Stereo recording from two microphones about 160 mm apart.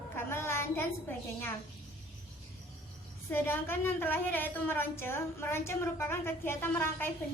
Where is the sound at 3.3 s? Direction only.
15° left (ahead or behind).